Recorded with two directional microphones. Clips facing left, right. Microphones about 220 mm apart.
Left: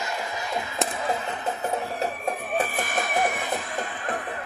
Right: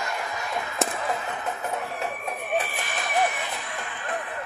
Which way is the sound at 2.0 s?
45° left (ahead or behind).